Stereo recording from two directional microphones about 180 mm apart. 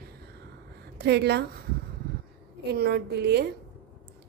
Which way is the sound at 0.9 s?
65° right (ahead or behind).